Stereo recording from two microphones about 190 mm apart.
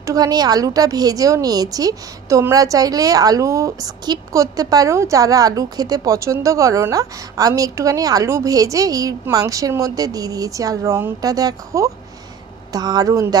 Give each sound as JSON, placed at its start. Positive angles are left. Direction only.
{"t": 0.0, "sound": "a woman's voice", "side_deg": -20}